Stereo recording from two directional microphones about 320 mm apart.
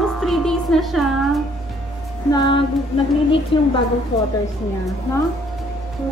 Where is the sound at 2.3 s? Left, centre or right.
Centre.